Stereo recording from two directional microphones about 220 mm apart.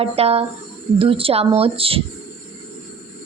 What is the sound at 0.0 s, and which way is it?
A woman's voice, 25° right (ahead or behind).